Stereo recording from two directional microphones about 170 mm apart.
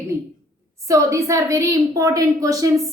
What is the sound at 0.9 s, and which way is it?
A woman's voice, 20° right (ahead or behind).